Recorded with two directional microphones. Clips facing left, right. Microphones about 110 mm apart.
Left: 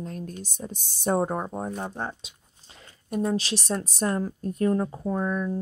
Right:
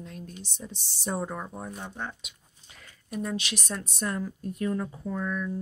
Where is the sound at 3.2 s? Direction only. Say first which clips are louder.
Left 7 dB; 35° left (ahead or behind).